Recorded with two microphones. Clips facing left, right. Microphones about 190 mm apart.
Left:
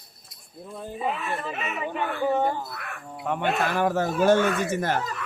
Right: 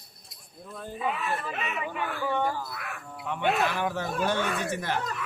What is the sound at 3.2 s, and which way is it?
Speech, 50° left (ahead or behind).